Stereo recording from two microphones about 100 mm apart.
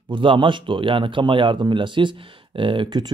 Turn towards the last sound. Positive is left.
turn(degrees=-50)  # may be behind; listen again after turning